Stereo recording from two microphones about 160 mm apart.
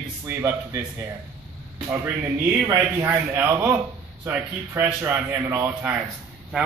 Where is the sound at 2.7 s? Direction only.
15° right (ahead or behind).